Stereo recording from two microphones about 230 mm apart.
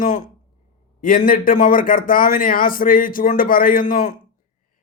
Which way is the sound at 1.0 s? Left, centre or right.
Left.